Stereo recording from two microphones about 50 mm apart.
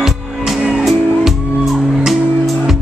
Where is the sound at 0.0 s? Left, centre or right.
Centre.